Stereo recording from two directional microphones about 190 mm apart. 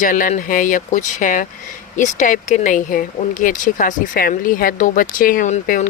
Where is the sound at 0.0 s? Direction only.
45° left (ahead or behind).